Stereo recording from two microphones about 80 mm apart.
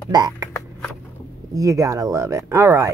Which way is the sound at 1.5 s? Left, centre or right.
Right.